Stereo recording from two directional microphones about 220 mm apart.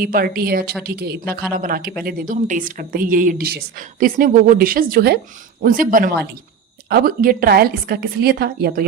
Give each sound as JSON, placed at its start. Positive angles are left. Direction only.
{"t": 0.0, "sound": "a woman's voice", "side_deg": -40}